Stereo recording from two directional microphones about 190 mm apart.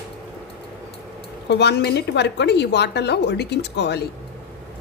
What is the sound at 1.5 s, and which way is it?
A woman's voice, 60° left (ahead or behind).